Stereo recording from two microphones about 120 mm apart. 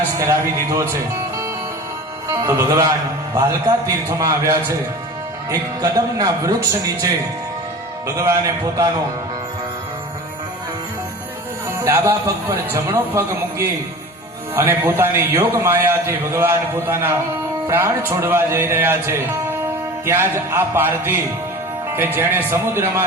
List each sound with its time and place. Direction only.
0.2 s a man's voice: 25° right (ahead or behind)
2.3 s a man's voice: 25° right (ahead or behind)
11.8 s a man's voice: 20° right (ahead or behind)